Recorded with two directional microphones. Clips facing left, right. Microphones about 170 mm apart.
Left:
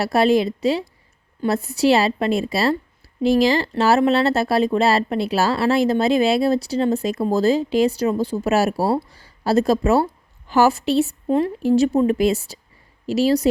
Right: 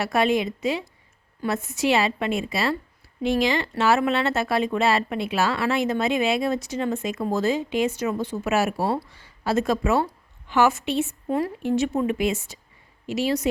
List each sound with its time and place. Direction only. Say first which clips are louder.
0.0 s a woman's voice: left 5 dB; 35° left (ahead or behind)